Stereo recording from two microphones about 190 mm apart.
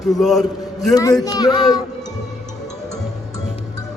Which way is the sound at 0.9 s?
20° left (ahead or behind).